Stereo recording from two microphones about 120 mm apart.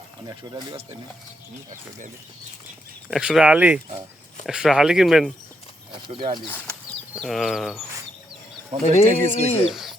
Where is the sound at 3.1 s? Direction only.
5° right (ahead or behind).